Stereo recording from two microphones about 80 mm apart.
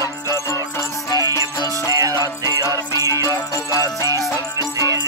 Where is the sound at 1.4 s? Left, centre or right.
Right.